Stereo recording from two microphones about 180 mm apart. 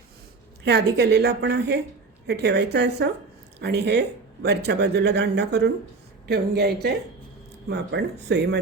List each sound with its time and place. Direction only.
0.6 s a woman's voice: 65° right (ahead or behind)